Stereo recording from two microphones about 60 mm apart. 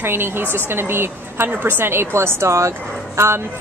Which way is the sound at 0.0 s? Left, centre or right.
Right.